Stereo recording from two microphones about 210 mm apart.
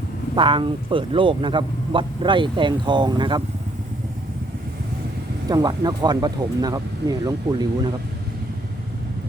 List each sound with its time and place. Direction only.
0.3 s speech: 25° right (ahead or behind)
5.5 s speech: 20° right (ahead or behind)